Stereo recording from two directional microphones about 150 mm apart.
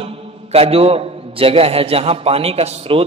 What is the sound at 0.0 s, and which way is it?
A man's voice, 40° right (ahead or behind).